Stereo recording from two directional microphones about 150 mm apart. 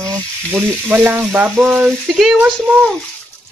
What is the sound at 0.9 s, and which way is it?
Frying, 10° right (ahead or behind).